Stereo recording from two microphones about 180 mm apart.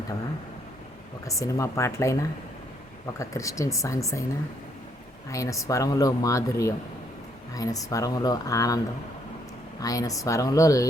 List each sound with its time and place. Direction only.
1.2 s speech: 15° left (ahead or behind)
5.3 s speech: 20° left (ahead or behind)
9.8 s speech: 20° left (ahead or behind)